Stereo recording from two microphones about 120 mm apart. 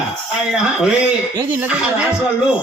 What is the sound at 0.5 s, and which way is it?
Speech, 5° right (ahead or behind).